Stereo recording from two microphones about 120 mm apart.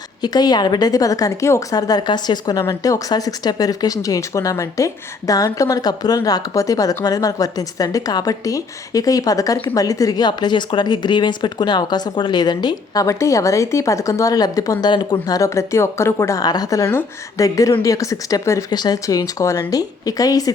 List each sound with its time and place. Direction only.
0.2 s a woman's voice: 35° left (ahead or behind)
15.4 s speech: 25° left (ahead or behind)